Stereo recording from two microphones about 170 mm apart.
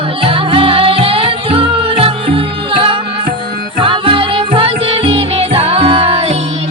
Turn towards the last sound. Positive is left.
turn(degrees=-35)  # may be behind; listen again after turning